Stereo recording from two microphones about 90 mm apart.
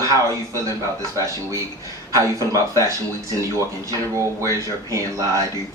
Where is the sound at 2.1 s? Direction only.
40° right (ahead or behind).